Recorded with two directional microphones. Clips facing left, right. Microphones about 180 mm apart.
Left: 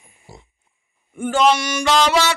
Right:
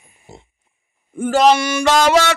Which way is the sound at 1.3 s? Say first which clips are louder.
Right 3 dB; 40° right (ahead or behind).